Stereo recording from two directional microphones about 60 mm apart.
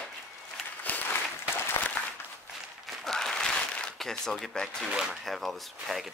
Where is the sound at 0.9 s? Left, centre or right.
Left.